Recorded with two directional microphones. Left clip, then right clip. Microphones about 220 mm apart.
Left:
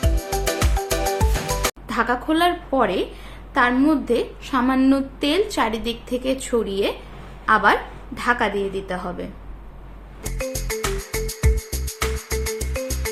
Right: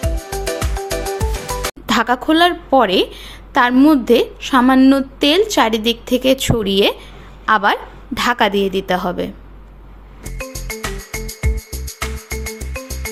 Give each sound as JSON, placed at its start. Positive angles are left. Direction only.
{"t": 0.6, "sound": "music", "side_deg": 0}
{"t": 1.9, "sound": "a woman's voice", "side_deg": -40}
{"t": 10.2, "sound": "music", "side_deg": 0}